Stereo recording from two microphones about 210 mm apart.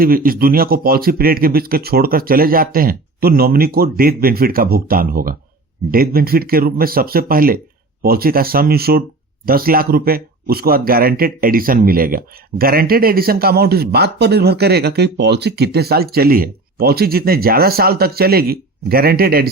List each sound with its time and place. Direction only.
0.0 s speech: 45° right (ahead or behind)